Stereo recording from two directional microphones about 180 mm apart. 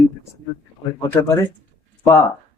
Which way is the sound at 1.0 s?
15° left (ahead or behind).